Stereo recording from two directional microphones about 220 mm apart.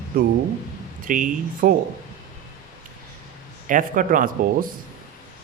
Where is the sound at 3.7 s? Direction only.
35° right (ahead or behind).